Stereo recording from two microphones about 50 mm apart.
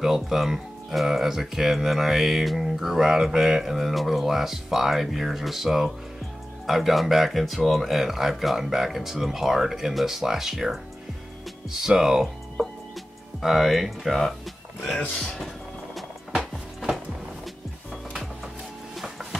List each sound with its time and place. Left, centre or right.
0.0 s speech: centre
13.4 s speech: centre
15.0 s speech: centre
15.4 s music: centre